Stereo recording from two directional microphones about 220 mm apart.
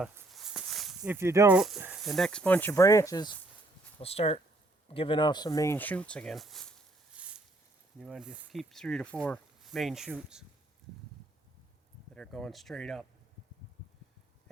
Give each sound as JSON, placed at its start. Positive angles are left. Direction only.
{"t": 0.0, "sound": "speech", "side_deg": 0}
{"t": 4.0, "sound": "speech", "side_deg": 25}
{"t": 7.2, "sound": "a sound", "side_deg": -5}
{"t": 7.9, "sound": "speech", "side_deg": 0}
{"t": 12.1, "sound": "speech", "side_deg": 5}